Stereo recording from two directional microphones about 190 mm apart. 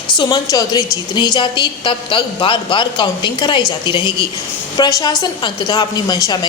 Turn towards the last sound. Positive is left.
turn(degrees=20)  # may be behind; listen again after turning